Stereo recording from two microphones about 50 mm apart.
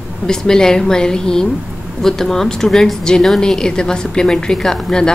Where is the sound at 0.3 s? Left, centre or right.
Centre.